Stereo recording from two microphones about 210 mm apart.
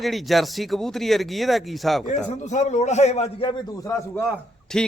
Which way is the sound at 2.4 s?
35° left (ahead or behind).